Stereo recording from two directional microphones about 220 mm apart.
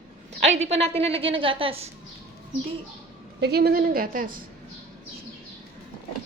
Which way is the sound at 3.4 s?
45° right (ahead or behind).